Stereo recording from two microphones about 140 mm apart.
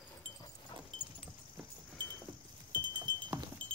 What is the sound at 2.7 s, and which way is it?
Wind chime, 30° right (ahead or behind).